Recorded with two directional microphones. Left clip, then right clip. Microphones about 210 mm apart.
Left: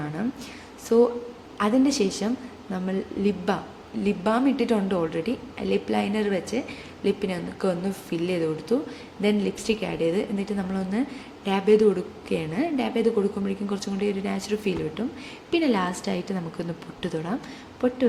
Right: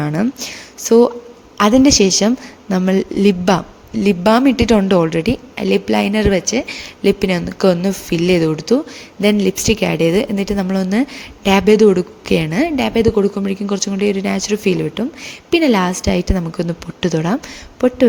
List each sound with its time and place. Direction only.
0.0 s a woman's voice: 45° right (ahead or behind)